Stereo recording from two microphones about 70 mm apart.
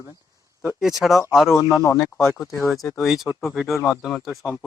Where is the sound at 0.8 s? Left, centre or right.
Centre.